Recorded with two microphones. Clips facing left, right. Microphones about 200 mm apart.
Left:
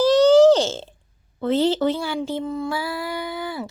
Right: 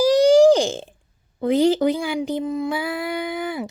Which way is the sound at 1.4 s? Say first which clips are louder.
Right 2 dB; 15° right (ahead or behind).